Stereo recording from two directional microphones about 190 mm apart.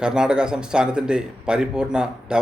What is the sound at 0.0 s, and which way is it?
Speech, 5° right (ahead or behind).